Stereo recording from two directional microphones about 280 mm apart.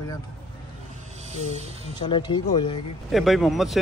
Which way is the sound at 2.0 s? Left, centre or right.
Centre.